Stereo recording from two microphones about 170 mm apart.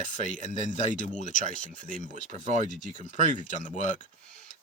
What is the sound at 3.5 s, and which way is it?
Speech, 50° left (ahead or behind).